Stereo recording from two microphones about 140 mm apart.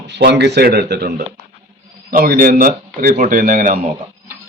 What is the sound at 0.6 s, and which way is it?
Speech, 90° right.